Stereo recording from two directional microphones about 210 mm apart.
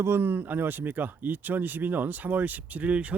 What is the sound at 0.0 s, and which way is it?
Speech, 10° right (ahead or behind).